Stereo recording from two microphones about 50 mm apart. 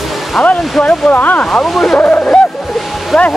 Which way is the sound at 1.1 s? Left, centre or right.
Left.